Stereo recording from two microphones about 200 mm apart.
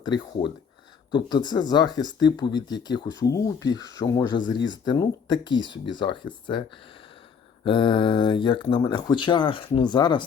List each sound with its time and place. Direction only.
0.4 s speech: 20° left (ahead or behind)
7.6 s speech: 25° left (ahead or behind)